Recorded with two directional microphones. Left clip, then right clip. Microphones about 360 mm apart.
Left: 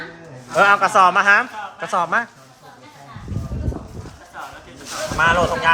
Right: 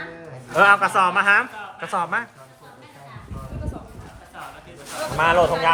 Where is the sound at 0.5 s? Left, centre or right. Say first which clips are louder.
Left 2 dB; centre.